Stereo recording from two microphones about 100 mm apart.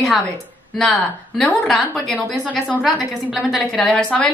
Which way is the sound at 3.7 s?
10° left (ahead or behind).